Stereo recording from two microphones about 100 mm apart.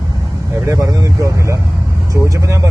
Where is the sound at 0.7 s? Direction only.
30° right (ahead or behind).